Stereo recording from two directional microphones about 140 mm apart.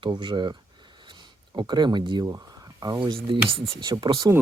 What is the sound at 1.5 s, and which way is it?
Speech, 30° right (ahead or behind).